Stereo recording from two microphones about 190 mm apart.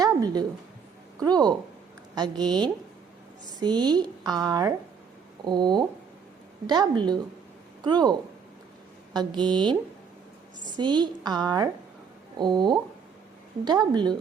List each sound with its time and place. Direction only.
0.0 s a sound: 20° right (ahead or behind)
1.2 s a woman's voice: 20° right (ahead or behind)
3.6 s a woman's voice: 20° right (ahead or behind)
9.1 s a woman's voice: 25° right (ahead or behind)